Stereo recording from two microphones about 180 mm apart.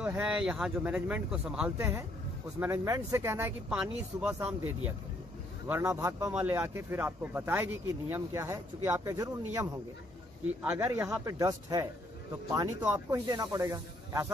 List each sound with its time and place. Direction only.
0.0 s speech: 5° right (ahead or behind)